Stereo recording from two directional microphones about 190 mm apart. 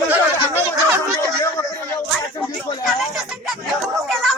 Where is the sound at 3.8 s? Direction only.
Centre (ahead or behind).